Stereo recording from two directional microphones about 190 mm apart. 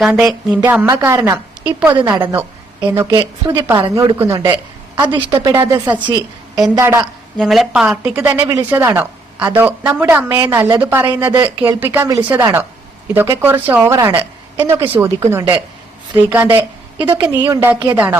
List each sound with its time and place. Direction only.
0.0 s a woman's voice: 5° right (ahead or behind)
7.3 s a woman's voice: centre (ahead or behind)